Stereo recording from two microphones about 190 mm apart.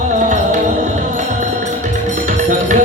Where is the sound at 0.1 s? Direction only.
40° right (ahead or behind).